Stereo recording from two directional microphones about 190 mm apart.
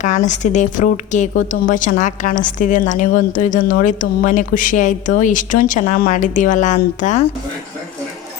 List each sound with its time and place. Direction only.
0.0 s speech: 40° left (ahead or behind)